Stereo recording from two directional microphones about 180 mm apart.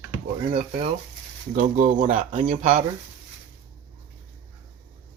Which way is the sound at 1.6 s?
45° right (ahead or behind).